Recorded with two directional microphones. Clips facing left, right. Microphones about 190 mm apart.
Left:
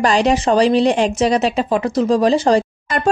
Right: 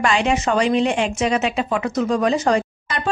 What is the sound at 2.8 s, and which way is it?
Speech, 45° left (ahead or behind).